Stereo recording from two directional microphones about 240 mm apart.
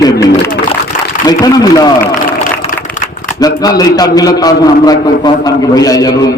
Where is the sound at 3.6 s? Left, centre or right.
Centre.